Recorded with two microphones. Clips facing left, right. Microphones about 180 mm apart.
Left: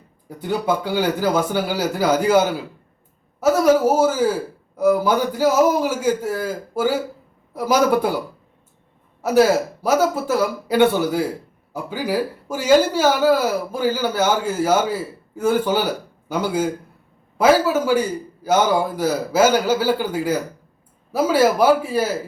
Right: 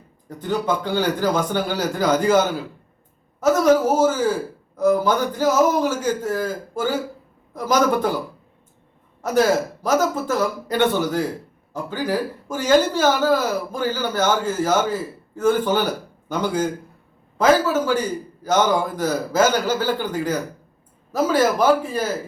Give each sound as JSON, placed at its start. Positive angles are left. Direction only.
{"t": 0.3, "sound": "speech", "side_deg": 10}
{"t": 3.4, "sound": "speech", "side_deg": 10}
{"t": 9.2, "sound": "speech", "side_deg": 10}